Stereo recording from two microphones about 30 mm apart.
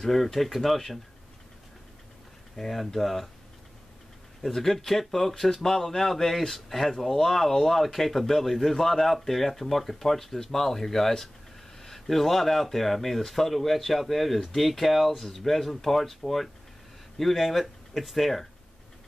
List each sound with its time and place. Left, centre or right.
0.0 s speech: centre
2.5 s speech: centre
4.5 s speech: centre
7.1 s speech: centre
7.3 s speech: centre
17.2 s speech: centre